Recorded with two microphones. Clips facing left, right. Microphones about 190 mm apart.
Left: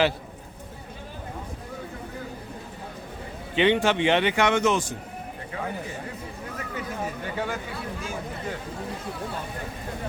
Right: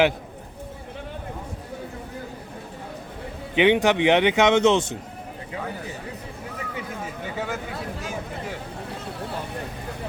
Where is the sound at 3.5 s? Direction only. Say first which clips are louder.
Right 3 dB; 15° right (ahead or behind).